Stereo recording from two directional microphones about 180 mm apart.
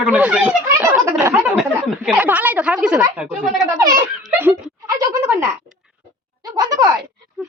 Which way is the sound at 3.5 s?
20° right (ahead or behind).